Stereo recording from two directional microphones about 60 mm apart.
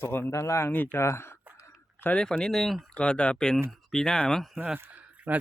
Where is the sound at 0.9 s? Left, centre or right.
Left.